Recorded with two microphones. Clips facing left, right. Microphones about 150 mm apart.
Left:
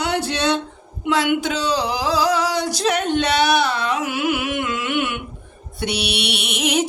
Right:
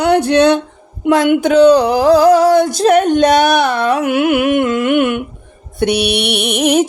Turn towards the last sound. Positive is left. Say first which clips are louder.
# right 8 dB
turn(degrees=-50)  # may be behind; listen again after turning